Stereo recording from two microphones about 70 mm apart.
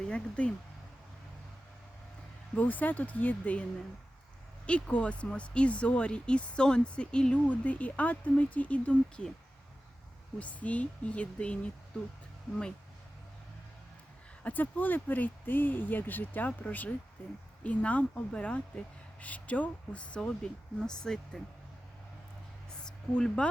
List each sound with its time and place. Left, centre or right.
0.0 s speech: centre
2.6 s speech: left
10.4 s speech: centre
14.4 s speech: left
17.6 s speech: centre
22.8 s a sound: centre